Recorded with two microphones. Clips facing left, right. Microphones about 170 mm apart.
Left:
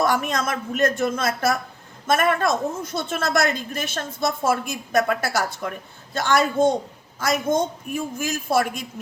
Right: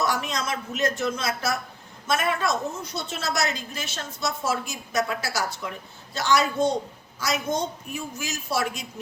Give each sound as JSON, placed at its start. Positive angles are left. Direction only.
{"t": 0.0, "sound": "a woman's voice", "side_deg": 50}